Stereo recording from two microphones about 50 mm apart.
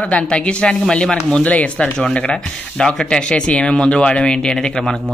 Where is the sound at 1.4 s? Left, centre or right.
Left.